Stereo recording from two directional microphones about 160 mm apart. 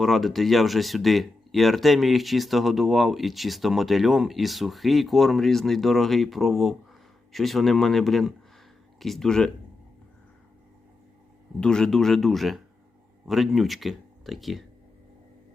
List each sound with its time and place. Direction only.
0.0 s speech: centre (ahead or behind)
11.6 s speech: 5° left (ahead or behind)